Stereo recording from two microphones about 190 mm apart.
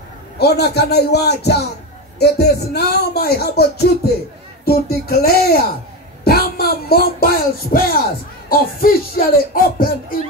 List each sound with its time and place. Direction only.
0.4 s speech: 60° left (ahead or behind)